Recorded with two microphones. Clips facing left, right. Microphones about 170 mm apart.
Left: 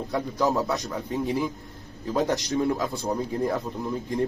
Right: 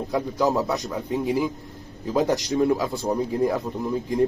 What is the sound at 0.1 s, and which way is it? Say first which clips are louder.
Speech: right 2 dB; centre (ahead or behind).